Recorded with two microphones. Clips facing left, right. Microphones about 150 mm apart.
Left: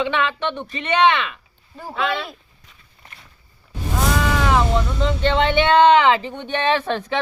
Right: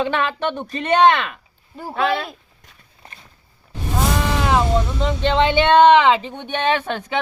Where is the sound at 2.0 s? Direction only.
45° right (ahead or behind).